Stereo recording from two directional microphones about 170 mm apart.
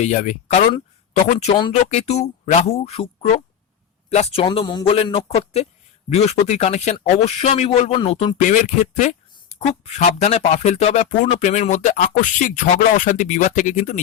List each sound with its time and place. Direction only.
0.0 s speech: 45° left (ahead or behind)
8.4 s speech: 50° left (ahead or behind)